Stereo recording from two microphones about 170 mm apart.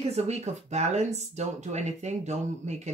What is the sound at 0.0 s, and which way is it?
Speech, 40° right (ahead or behind).